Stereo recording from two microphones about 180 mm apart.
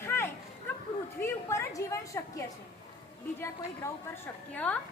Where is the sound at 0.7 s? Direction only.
10° left (ahead or behind).